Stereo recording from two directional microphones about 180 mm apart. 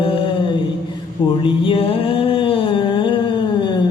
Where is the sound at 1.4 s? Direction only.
30° left (ahead or behind).